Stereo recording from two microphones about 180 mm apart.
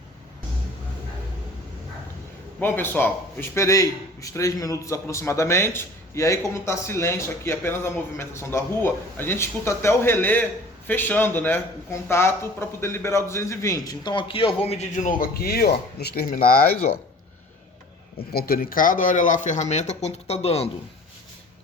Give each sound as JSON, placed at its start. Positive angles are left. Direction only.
{"t": 2.6, "sound": "a man's voice", "side_deg": 10}
{"t": 18.3, "sound": "speech", "side_deg": 55}